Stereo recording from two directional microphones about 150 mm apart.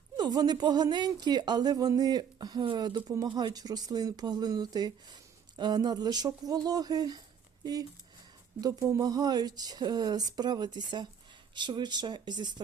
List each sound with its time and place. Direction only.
0.2 s a woman's voice: 25° right (ahead or behind)